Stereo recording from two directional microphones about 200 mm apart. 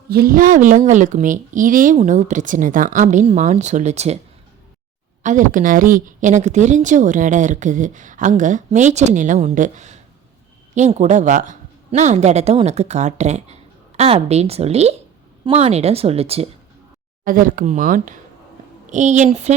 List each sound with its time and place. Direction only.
0.1 s a woman's voice: 45° right (ahead or behind)
5.2 s a woman's voice: 40° right (ahead or behind)
17.2 s a woman's voice: 40° right (ahead or behind)